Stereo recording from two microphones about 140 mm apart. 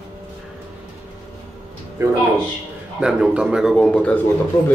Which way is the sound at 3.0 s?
5° right (ahead or behind).